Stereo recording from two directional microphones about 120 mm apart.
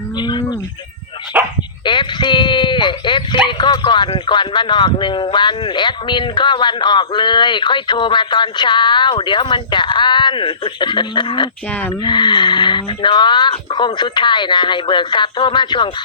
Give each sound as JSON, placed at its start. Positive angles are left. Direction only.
{"t": 0.2, "sound": "livestock", "side_deg": 40}
{"t": 1.3, "sound": "dog", "side_deg": -10}
{"t": 1.8, "sound": "a sound", "side_deg": 40}
{"t": 3.6, "sound": "speech", "side_deg": 40}